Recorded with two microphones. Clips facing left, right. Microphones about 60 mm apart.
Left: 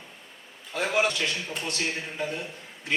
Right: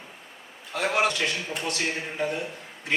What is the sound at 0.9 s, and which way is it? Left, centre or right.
A man's voice, right.